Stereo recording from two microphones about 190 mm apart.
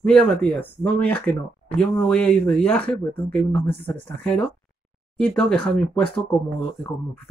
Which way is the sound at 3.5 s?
30° left (ahead or behind).